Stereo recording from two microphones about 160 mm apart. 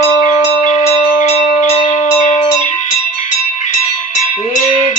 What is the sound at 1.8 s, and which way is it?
Music, 45° left (ahead or behind).